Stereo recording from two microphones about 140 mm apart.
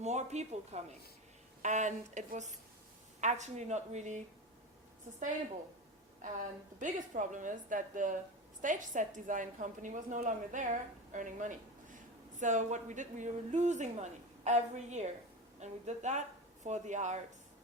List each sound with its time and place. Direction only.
0.0 s a woman's voice: 55° right (ahead or behind)
6.2 s a woman's voice: 65° right (ahead or behind)